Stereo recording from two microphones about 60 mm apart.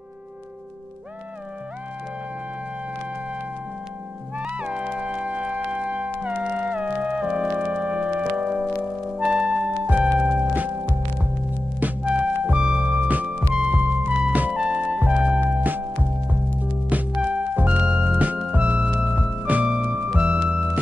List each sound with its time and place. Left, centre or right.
4.4 s music: centre
10.5 s music: right
12.0 s music: centre
15.4 s music: right
17.2 s music: centre